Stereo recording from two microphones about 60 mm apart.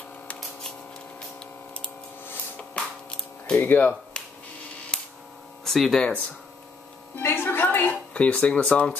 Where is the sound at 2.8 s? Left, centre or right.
Centre.